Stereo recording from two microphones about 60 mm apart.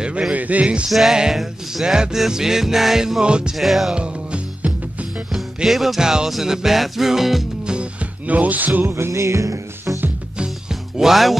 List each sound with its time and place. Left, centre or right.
0.0 s speech: centre
0.8 s music: centre
3.5 s music: centre
3.9 s music: centre
5.3 s music: centre
8.3 s speech: right
8.9 s music: right
10.3 s music: centre
11.0 s music: centre